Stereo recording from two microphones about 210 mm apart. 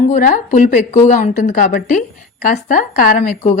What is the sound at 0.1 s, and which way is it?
A woman's voice, 35° left (ahead or behind).